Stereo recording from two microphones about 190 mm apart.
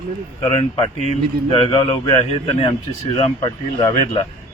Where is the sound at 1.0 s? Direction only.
35° left (ahead or behind).